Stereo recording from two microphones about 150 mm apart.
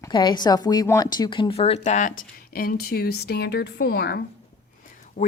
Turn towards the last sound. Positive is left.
turn(degrees=90)